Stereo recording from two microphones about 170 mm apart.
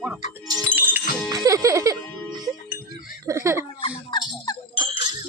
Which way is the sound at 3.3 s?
15° right (ahead or behind).